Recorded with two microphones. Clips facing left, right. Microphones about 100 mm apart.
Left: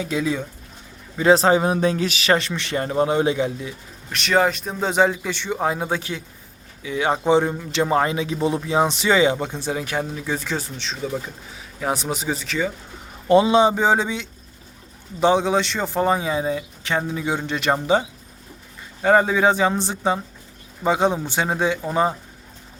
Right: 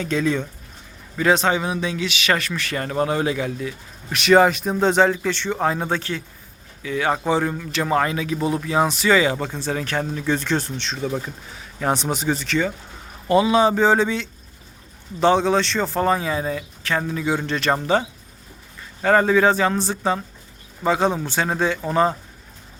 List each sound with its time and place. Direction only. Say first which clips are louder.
0.0 s speech: right 2 dB; 10° left (ahead or behind)
1.1 s a man's voice: left 3 dB; 25° left (ahead or behind)
1.4 s speech: left 4 dB; 35° left (ahead or behind); by 3.8 s 20° left (ahead or behind)
4.1 s speech: right 4 dB; 5° right (ahead or behind)
13.2 s speech: left 2 dB; 25° left (ahead or behind)
19.0 s speech: even; 15° left (ahead or behind)